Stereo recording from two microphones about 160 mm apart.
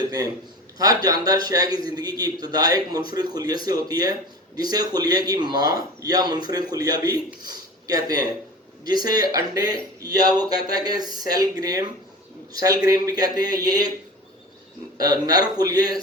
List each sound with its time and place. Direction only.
0.8 s a man's voice: 25° right (ahead or behind)
14.9 s speech: 25° right (ahead or behind)